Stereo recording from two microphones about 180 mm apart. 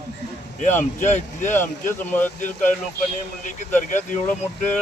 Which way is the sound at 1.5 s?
10° left (ahead or behind).